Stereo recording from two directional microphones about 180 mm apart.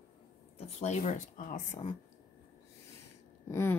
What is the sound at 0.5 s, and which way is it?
Speech, 35° left (ahead or behind).